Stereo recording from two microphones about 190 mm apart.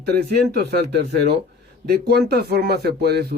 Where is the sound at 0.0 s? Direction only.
55° right (ahead or behind).